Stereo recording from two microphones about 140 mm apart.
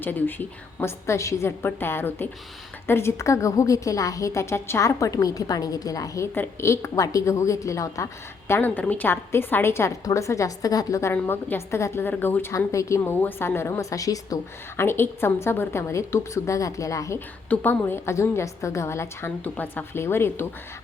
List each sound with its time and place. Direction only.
0.0 s a woman's voice: 15° left (ahead or behind)